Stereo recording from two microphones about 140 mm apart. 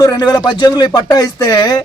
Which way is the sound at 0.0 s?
30° left (ahead or behind).